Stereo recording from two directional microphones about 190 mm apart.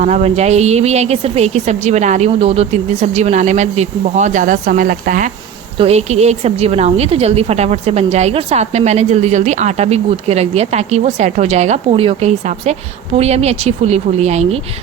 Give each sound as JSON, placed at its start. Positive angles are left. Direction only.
{"t": 0.0, "sound": "a woman's voice", "side_deg": -35}
{"t": 5.7, "sound": "a woman's voice", "side_deg": -30}